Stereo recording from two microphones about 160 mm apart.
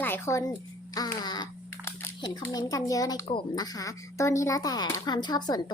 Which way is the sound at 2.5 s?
25° left (ahead or behind).